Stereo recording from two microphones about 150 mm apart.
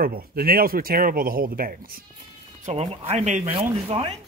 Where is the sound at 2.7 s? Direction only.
45° right (ahead or behind).